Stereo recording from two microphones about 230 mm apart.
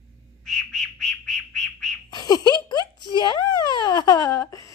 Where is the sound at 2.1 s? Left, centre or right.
Centre.